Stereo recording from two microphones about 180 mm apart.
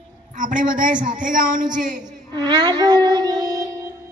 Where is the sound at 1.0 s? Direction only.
50° right (ahead or behind).